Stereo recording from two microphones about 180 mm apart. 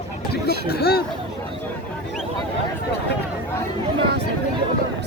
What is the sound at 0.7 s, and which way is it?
Speech, 60° left (ahead or behind).